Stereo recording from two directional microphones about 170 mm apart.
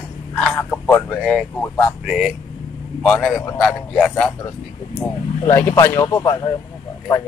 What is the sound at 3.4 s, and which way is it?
Speech, 20° left (ahead or behind).